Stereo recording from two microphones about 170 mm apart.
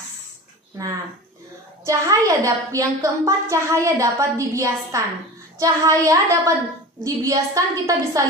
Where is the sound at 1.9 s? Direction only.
20° right (ahead or behind).